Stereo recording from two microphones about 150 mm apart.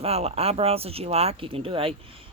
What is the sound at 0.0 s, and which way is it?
Speech, 45° right (ahead or behind).